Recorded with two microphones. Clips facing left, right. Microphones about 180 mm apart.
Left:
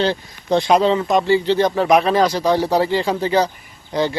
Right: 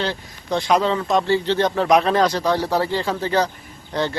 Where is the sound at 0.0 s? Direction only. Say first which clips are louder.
Left 6 dB; 25° left (ahead or behind).